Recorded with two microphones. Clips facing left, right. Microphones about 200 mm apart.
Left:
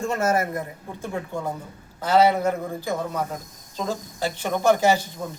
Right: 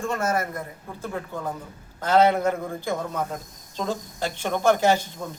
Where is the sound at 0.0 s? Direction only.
25° left (ahead or behind).